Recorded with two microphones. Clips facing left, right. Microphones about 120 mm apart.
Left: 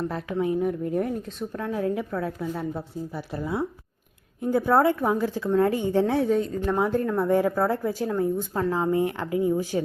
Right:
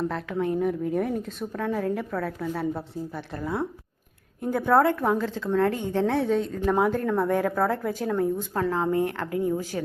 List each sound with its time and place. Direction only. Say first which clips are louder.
0.0 s a woman's voice: even; 5° left (ahead or behind)